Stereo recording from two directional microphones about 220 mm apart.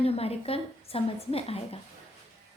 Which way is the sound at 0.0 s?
25° left (ahead or behind).